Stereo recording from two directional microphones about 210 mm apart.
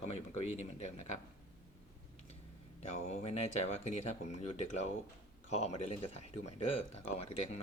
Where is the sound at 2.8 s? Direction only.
30° left (ahead or behind).